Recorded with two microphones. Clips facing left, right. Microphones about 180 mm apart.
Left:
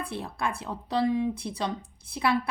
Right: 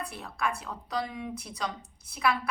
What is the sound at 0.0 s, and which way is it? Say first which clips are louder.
Speech: left 2 dB; 30° left (ahead or behind).